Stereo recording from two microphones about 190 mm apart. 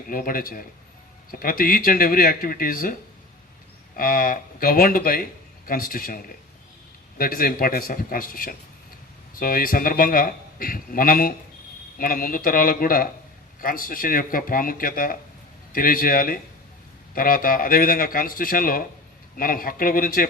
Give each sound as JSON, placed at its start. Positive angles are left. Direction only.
{"t": 0.1, "sound": "speech", "side_deg": 50}